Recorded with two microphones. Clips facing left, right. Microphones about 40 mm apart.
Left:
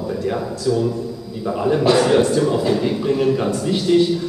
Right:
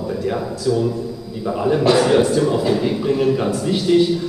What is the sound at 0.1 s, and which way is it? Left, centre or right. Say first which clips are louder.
A man's voice: even; centre.